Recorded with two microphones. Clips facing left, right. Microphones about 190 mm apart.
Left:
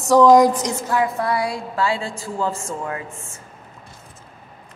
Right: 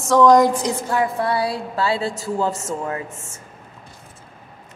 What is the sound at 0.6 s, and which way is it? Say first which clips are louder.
A woman's voice: even; 30° right (ahead or behind).